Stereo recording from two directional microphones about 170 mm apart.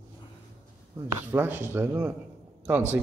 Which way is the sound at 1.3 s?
10° right (ahead or behind).